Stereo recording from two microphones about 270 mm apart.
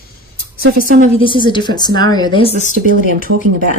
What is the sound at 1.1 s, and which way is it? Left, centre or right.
A woman's voice, centre.